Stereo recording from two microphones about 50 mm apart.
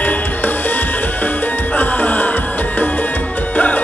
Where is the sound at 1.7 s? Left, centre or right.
Left.